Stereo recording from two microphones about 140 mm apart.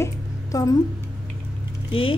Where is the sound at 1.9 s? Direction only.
40° left (ahead or behind).